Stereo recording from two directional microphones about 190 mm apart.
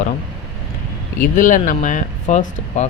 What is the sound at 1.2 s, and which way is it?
Speech, 45° left (ahead or behind).